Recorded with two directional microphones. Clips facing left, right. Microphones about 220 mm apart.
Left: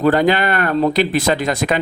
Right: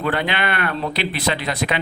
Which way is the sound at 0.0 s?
40° left (ahead or behind).